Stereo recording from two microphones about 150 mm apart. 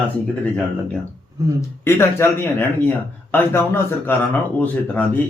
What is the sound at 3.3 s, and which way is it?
Speech, 15° left (ahead or behind).